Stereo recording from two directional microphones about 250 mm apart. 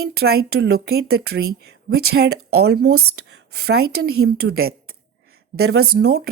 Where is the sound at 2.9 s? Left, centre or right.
Right.